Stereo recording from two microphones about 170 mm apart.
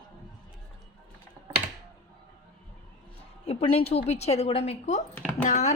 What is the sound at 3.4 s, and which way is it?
A woman's voice, 35° left (ahead or behind).